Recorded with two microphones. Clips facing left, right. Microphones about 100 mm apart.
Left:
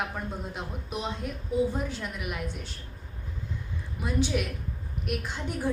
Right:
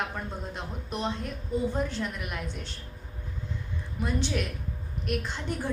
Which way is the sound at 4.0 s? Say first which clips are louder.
Left 2 dB; 5° left (ahead or behind).